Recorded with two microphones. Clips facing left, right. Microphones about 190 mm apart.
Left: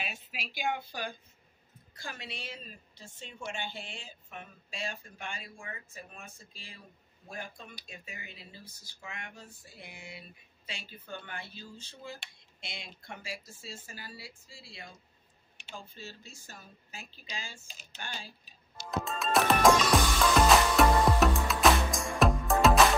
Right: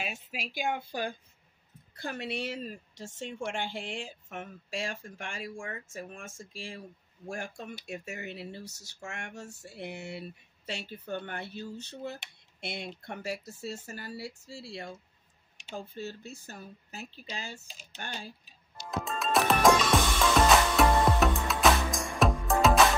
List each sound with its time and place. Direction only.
0.0 s a woman's voice: 45° right (ahead or behind)
2.0 s a woman's voice: 60° right (ahead or behind); by 14.8 s 75° right (ahead or behind)
15.7 s speech: 60° right (ahead or behind)
18.9 s music: centre (ahead or behind)